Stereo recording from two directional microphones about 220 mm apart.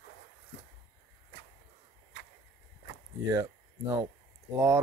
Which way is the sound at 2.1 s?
50° left (ahead or behind).